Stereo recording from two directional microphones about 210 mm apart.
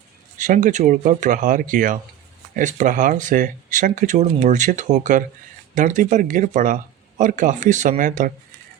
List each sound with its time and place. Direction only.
0.3 s speech: 35° right (ahead or behind)